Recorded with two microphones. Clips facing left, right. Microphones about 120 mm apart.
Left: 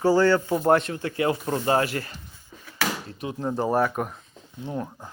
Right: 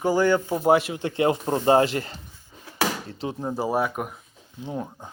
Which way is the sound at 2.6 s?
30° right (ahead or behind).